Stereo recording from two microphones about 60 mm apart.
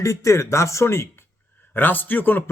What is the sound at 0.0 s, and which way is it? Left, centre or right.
Speech, left.